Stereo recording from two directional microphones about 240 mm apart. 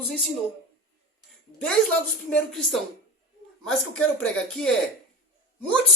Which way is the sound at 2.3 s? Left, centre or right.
Centre.